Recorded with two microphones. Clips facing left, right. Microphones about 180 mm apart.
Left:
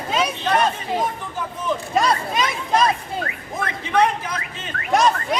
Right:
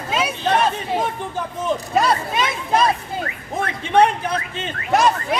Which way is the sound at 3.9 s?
30° right (ahead or behind).